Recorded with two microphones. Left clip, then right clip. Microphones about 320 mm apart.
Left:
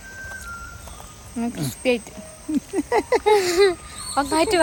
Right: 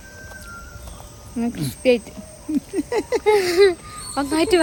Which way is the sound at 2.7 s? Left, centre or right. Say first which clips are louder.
Left 3 dB; centre.